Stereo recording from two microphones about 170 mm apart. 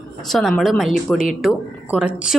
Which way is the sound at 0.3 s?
Centre (ahead or behind).